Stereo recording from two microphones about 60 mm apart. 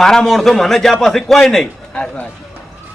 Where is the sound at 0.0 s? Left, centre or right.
Centre.